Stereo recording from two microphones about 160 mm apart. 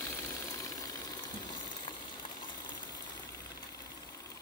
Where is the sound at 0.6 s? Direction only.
20° left (ahead or behind).